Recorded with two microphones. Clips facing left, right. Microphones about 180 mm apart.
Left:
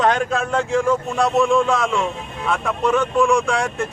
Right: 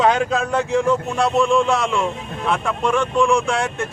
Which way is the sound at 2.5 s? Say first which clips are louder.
Left 1 dB; centre (ahead or behind).